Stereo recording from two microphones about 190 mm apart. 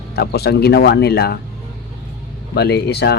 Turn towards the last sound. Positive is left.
turn(degrees=60)  # may be behind; listen again after turning